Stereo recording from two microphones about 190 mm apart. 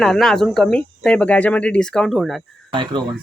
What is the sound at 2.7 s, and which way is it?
Speech, 25° right (ahead or behind).